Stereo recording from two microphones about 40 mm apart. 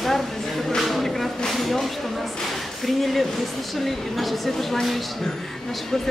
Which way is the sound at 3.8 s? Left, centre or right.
Centre.